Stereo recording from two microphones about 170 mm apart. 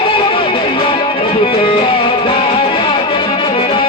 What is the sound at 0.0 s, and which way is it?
Music, 30° left (ahead or behind).